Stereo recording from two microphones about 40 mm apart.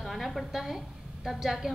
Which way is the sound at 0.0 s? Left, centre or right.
Centre.